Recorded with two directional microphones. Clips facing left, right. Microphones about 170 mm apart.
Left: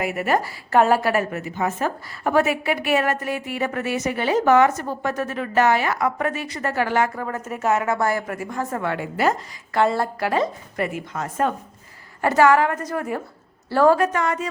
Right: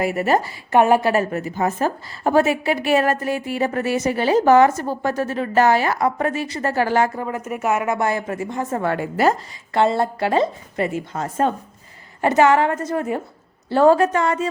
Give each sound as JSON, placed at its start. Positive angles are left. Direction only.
{"t": 0.0, "sound": "a woman's voice", "side_deg": -35}
{"t": 7.3, "sound": "a woman's voice", "side_deg": -15}
{"t": 8.8, "sound": "a woman's voice", "side_deg": -40}
{"t": 9.7, "sound": "a woman's voice", "side_deg": -25}